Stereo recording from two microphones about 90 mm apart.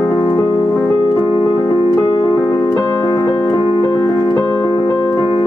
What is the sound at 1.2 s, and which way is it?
Music, 55° left (ahead or behind).